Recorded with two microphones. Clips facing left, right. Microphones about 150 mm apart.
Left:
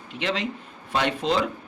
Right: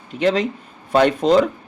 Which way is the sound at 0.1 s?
40° right (ahead or behind).